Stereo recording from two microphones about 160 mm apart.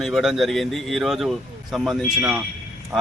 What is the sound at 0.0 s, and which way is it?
A man's voice, centre (ahead or behind).